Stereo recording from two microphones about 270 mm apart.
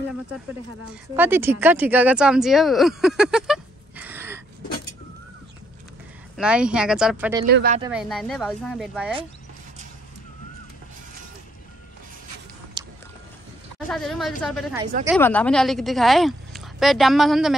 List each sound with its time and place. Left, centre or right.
1.1 s speech: centre
6.3 s a woman's voice: centre
7.4 s speech: right
7.9 s a woman's voice: centre
12.8 s biting: centre
13.8 s a woman's voice: centre